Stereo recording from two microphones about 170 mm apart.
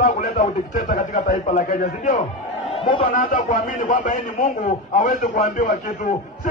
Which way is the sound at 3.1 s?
50° left (ahead or behind).